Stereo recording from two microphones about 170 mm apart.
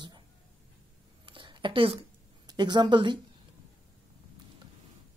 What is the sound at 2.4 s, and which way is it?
Speech, 25° right (ahead or behind).